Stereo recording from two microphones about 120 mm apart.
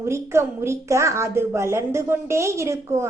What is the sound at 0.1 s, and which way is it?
A woman's voice, 20° right (ahead or behind).